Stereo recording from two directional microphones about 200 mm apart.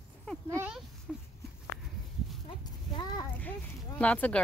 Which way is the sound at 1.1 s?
Centre (ahead or behind).